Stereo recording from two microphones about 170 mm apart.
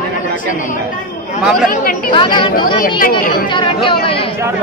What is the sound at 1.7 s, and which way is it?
Speech, 55° left (ahead or behind).